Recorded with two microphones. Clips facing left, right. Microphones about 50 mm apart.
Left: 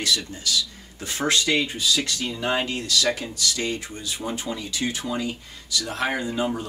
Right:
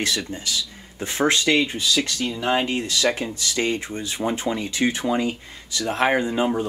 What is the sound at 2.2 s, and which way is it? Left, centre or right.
Speech, centre.